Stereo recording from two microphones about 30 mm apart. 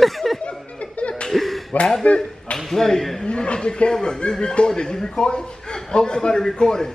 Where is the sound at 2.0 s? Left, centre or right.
Left.